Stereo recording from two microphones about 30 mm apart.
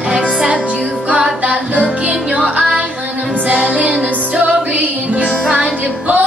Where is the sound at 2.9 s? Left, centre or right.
Right.